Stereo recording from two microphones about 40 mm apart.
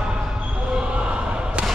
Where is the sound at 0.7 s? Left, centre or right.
Right.